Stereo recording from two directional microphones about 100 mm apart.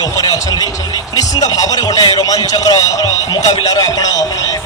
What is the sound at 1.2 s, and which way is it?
A man's voice, 35° left (ahead or behind).